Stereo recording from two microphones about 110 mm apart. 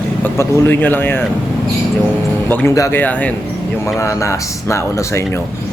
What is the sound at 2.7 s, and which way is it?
Speech, 30° left (ahead or behind).